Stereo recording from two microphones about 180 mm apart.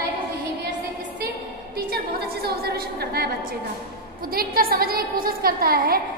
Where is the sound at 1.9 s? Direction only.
60° right (ahead or behind).